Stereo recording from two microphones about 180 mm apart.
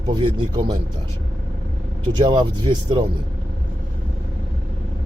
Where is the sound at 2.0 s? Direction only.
25° right (ahead or behind).